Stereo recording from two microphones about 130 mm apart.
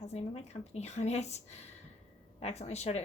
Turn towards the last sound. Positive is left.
turn(degrees=55)  # may be behind; listen again after turning